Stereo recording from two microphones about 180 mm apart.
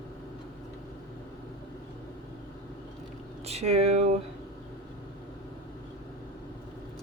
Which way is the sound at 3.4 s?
35° right (ahead or behind).